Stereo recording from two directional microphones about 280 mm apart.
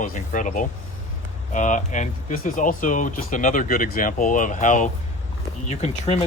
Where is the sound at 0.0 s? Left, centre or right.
Left.